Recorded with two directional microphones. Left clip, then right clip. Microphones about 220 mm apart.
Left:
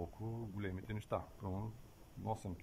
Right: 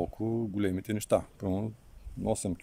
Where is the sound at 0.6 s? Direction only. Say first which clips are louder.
Right 15 dB; 55° right (ahead or behind).